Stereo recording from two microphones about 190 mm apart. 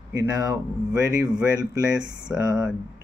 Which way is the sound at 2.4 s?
15° right (ahead or behind).